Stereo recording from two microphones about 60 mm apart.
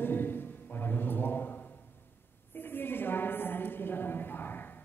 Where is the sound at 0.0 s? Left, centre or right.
Left.